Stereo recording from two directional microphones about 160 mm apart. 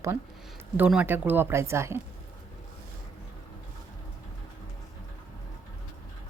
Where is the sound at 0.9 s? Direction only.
10° right (ahead or behind).